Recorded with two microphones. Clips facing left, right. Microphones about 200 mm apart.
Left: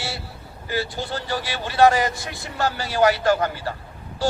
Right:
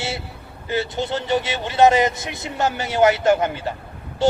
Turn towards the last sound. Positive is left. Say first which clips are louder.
# right 5 dB
turn(degrees=-20)  # may be behind; listen again after turning